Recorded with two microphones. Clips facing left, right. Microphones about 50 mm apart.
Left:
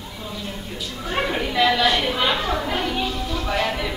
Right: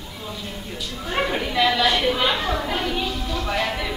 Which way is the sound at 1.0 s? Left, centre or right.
Centre.